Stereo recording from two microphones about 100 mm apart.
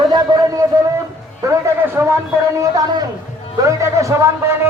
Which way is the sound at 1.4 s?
30° right (ahead or behind).